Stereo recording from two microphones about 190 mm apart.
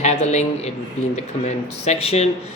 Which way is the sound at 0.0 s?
35° left (ahead or behind).